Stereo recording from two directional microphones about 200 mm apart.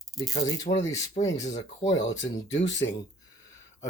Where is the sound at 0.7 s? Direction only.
35° left (ahead or behind).